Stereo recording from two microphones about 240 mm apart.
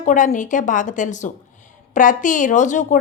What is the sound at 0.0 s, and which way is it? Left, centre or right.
A woman's voice, left.